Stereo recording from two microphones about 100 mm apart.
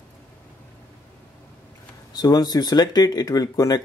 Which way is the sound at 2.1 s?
40° left (ahead or behind).